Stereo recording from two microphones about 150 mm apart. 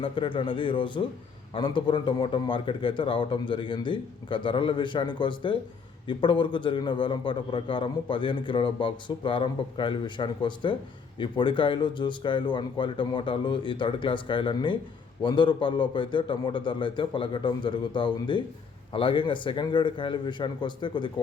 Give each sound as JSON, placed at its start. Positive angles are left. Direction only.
{"t": 0.0, "sound": "a man's voice", "side_deg": 35}